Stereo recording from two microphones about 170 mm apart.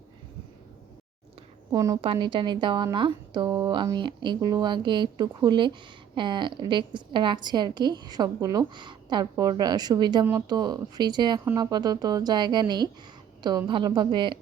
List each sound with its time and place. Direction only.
1.7 s a woman's voice: 20° right (ahead or behind)
2.0 s a woman's voice: 30° right (ahead or behind)